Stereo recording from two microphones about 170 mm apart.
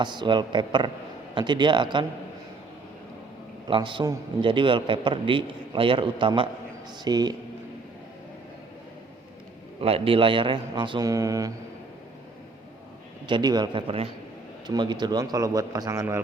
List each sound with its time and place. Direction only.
0.0 s a man's voice: 25° right (ahead or behind)
3.7 s a man's voice: 30° right (ahead or behind)
9.8 s a man's voice: 35° right (ahead or behind)
13.2 s a man's voice: 25° right (ahead or behind)